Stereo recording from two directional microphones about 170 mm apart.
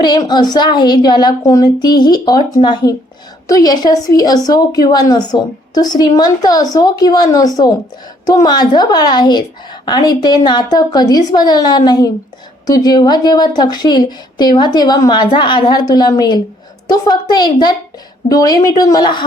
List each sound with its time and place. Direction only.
0.0 s a woman's voice: 25° left (ahead or behind)